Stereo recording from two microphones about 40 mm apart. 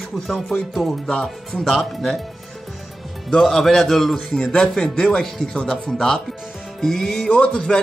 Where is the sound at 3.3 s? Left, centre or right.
Centre.